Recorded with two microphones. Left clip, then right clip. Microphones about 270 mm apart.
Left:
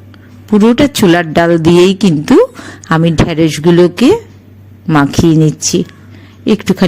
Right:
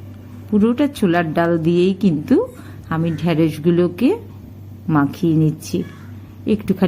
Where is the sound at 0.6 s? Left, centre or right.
Left.